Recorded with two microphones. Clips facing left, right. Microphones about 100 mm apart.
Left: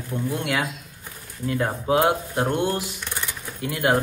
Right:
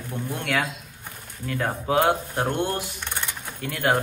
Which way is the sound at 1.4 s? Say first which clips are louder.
Left 3 dB; 15° left (ahead or behind).